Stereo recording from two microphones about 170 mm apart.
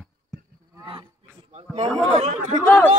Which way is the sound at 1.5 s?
40° right (ahead or behind).